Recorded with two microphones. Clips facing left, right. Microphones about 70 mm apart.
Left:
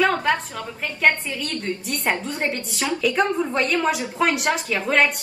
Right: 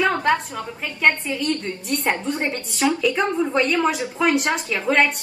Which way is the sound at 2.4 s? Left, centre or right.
Right.